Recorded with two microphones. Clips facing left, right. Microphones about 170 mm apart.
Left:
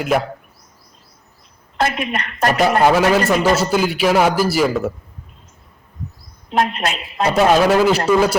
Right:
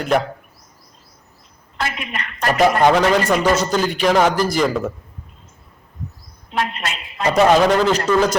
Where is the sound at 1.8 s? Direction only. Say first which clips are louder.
Left 6 dB; 45° left (ahead or behind).